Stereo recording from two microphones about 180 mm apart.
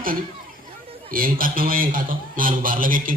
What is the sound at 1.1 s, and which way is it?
A man's voice, 50° right (ahead or behind).